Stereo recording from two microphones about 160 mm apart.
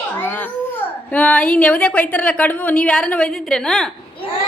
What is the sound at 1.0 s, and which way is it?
A woman's voice, 5° left (ahead or behind).